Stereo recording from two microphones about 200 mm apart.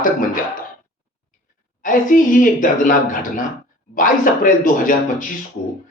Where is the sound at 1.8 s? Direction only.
40° left (ahead or behind).